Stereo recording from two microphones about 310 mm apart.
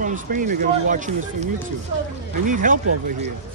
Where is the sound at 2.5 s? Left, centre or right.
Right.